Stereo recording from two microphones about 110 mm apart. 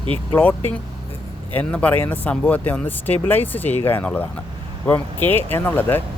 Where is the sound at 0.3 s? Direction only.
15° left (ahead or behind).